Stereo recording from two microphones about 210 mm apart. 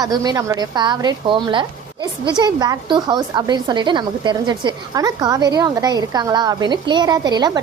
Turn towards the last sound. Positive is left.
turn(degrees=-20)  # may be behind; listen again after turning